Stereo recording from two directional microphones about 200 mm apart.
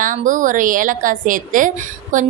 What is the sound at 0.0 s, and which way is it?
A woman's voice, 40° right (ahead or behind).